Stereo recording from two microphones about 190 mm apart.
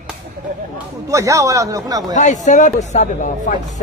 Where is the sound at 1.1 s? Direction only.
15° right (ahead or behind).